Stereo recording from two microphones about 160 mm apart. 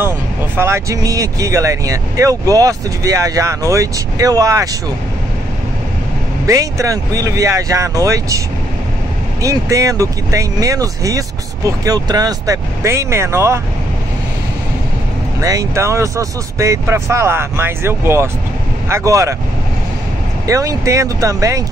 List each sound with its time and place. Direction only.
0.6 s speech: 15° right (ahead or behind)
6.4 s speech: 20° right (ahead or behind)
9.4 s speech: 20° right (ahead or behind)
15.4 s speech: 20° right (ahead or behind)
20.4 s speech: 20° right (ahead or behind)